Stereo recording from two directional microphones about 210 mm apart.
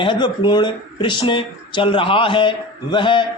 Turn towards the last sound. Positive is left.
turn(degrees=25)  # may be behind; listen again after turning